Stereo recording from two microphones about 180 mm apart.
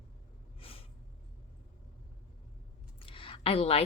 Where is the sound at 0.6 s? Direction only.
30° left (ahead or behind).